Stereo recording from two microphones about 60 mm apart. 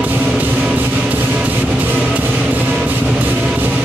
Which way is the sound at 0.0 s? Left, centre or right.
Right.